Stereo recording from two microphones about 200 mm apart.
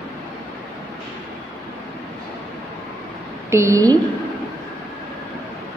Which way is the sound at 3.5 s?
15° right (ahead or behind).